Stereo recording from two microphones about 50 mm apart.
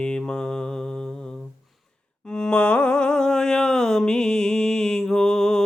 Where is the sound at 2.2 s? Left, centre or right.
Centre.